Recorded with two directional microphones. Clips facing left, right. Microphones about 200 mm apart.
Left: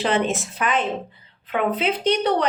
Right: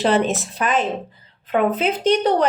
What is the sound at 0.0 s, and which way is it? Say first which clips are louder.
A woman's voice: right 3 dB; 40° right (ahead or behind).